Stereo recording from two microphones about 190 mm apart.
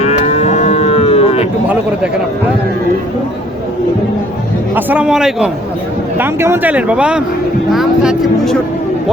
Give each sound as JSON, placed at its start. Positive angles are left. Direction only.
{"t": 0.0, "sound": "moo", "side_deg": 35}
{"t": 1.6, "sound": "a sound", "side_deg": -5}
{"t": 4.7, "sound": "speech", "side_deg": -10}